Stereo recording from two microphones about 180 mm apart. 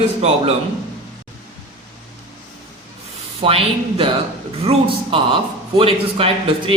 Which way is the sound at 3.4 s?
30° right (ahead or behind).